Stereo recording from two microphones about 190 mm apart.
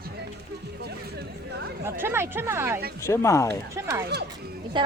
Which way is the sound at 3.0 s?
15° left (ahead or behind).